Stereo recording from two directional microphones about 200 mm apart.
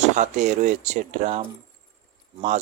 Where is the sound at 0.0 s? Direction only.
35° right (ahead or behind).